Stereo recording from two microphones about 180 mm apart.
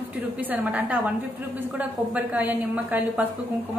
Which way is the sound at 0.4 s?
10° right (ahead or behind).